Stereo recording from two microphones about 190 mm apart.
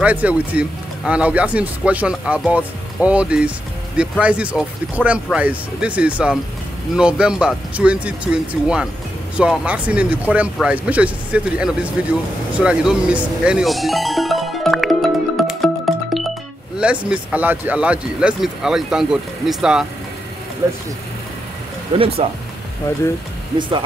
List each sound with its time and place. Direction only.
0.0 s speech: 10° right (ahead or behind)
12.5 s music: 5° right (ahead or behind)
16.7 s speech: 5° right (ahead or behind)
21.9 s speech: 30° right (ahead or behind)